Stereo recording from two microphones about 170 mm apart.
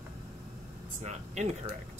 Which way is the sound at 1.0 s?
45° right (ahead or behind).